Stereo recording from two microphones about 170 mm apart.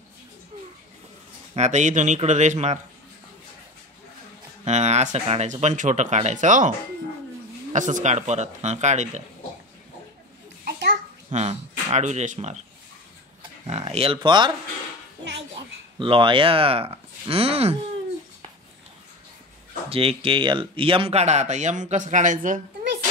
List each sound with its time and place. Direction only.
1.5 s speech: 45° right (ahead or behind)
4.6 s speech: 40° right (ahead or behind)
7.7 s speech: 45° right (ahead or behind)
11.2 s speech: 40° right (ahead or behind)
13.7 s speech: 35° right (ahead or behind)
16.0 s speech: 30° right (ahead or behind)
19.9 s speech: 35° right (ahead or behind); by 22.6 s 50° right (ahead or behind)